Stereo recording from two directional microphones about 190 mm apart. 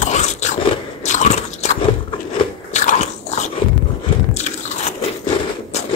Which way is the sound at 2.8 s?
35° left (ahead or behind).